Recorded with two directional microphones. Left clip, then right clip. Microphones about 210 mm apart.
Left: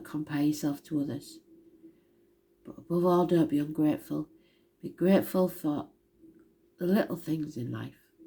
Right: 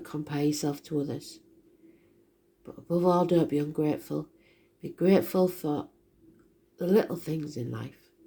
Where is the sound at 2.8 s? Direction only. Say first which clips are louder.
Right 1 dB; 30° right (ahead or behind).